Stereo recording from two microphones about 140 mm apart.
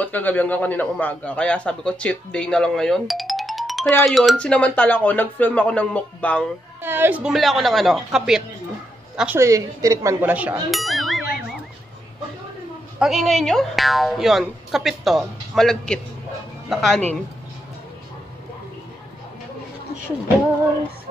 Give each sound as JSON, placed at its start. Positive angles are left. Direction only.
{"t": 0.0, "sound": "a man's voice", "side_deg": 10}
{"t": 6.8, "sound": "a woman's voice", "side_deg": -15}
{"t": 7.3, "sound": "a woman's voice", "side_deg": 0}
{"t": 9.4, "sound": "a woman's voice", "side_deg": -20}
{"t": 10.3, "sound": "a woman's voice", "side_deg": -10}
{"t": 10.7, "sound": "a sound", "side_deg": 0}
{"t": 13.0, "sound": "speech", "side_deg": 0}